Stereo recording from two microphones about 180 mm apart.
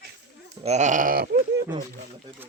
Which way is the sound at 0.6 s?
40° right (ahead or behind).